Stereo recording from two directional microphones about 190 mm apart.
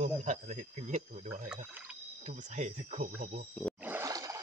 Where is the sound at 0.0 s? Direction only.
40° right (ahead or behind).